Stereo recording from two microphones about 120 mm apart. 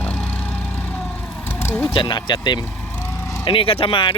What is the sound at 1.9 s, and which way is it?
Speech, 40° left (ahead or behind).